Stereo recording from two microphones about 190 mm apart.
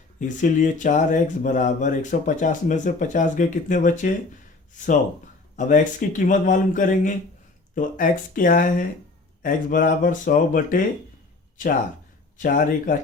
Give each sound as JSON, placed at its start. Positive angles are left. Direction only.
{"t": 0.2, "sound": "speech", "side_deg": 40}
{"t": 5.5, "sound": "speech", "side_deg": 40}
{"t": 12.4, "sound": "speech", "side_deg": 45}